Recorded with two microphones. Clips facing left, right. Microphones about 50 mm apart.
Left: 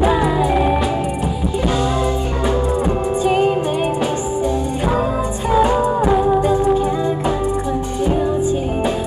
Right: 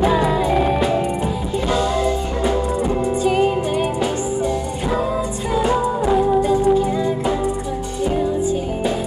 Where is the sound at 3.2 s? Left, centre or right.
Left.